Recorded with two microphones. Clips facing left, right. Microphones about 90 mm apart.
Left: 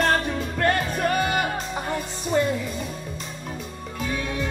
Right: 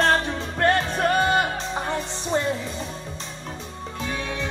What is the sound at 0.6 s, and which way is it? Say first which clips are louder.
Music: right 2 dB; 30° right (ahead or behind).